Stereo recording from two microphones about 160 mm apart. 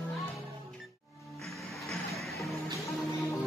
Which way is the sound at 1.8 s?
Centre (ahead or behind).